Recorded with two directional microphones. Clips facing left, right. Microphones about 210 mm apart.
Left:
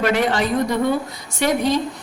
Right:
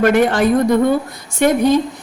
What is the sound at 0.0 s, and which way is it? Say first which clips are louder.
A woman's voice: right 6 dB; 50° right (ahead or behind).